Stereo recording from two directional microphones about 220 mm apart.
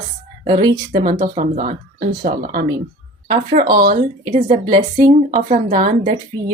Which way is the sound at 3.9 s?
30° right (ahead or behind).